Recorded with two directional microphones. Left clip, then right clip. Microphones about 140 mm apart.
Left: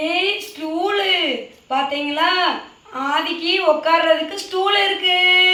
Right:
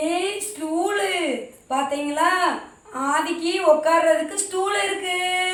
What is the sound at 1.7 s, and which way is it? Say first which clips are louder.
A woman's voice: left 3 dB; 25° right (ahead or behind).